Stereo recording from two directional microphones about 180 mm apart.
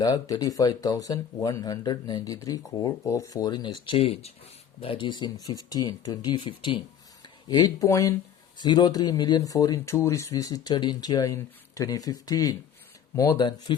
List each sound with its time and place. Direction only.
0.0 s speech: 20° left (ahead or behind)